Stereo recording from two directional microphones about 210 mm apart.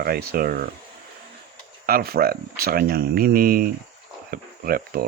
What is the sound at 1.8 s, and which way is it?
Speech, 45° right (ahead or behind).